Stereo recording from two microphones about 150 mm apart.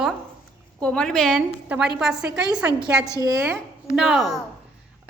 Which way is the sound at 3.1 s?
20° right (ahead or behind).